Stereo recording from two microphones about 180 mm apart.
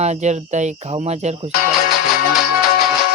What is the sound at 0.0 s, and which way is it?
Speech, 40° right (ahead or behind).